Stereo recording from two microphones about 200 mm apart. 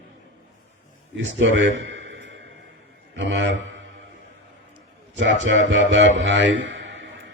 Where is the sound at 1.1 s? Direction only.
65° right (ahead or behind).